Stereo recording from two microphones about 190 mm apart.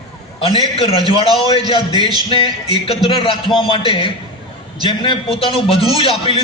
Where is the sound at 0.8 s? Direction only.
20° right (ahead or behind).